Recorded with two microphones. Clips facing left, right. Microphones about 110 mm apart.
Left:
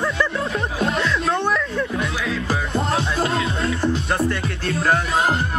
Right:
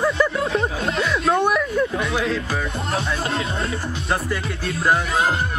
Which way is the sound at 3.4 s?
30° right (ahead or behind).